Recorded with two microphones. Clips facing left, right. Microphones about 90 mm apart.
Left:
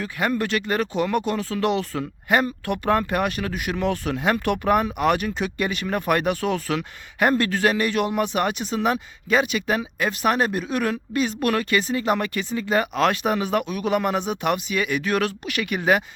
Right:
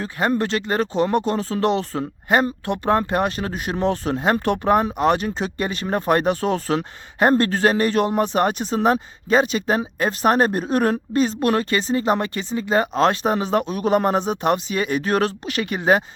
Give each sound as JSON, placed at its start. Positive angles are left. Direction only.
{"t": 0.0, "sound": "speech", "side_deg": -30}